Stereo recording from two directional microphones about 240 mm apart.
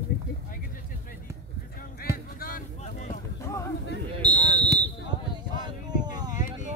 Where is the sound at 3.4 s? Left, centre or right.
Centre.